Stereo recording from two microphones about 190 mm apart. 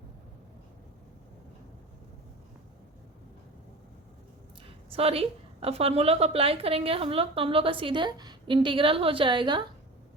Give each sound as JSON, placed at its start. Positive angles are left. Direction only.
{"t": 4.9, "sound": "a woman's voice", "side_deg": -30}